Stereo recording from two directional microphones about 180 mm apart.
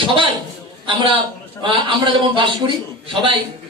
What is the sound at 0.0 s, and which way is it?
Chuckle, 30° right (ahead or behind).